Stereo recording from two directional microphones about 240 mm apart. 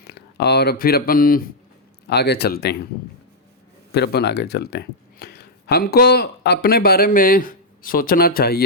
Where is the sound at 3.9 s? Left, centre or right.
Left.